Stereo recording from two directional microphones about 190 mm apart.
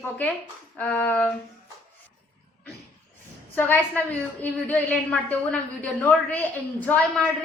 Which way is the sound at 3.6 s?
10° left (ahead or behind).